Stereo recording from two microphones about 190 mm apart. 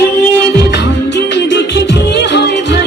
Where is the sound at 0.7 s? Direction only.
65° left (ahead or behind).